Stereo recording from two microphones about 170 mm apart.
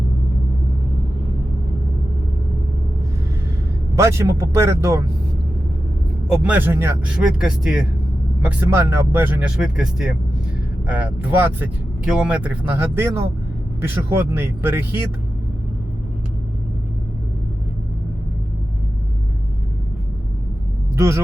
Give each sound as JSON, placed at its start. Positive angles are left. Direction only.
{"t": 3.9, "sound": "speech", "side_deg": -15}
{"t": 6.3, "sound": "speech", "side_deg": -10}
{"t": 20.9, "sound": "speech", "side_deg": -15}